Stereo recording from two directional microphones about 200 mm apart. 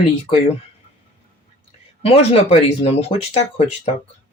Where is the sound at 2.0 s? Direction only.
30° left (ahead or behind).